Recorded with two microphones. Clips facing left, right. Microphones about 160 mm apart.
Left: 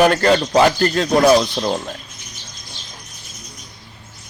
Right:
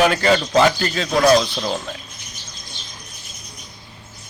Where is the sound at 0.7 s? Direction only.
50° left (ahead or behind).